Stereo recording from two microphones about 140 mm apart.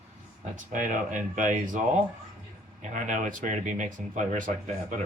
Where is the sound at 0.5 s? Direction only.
65° right (ahead or behind).